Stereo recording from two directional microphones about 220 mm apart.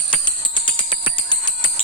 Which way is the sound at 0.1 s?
20° left (ahead or behind).